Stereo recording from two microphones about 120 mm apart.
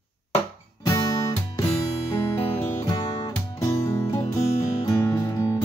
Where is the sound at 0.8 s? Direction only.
30° left (ahead or behind).